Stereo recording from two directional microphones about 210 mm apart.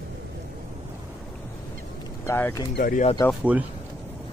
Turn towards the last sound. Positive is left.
turn(degrees=-5)  # may be behind; listen again after turning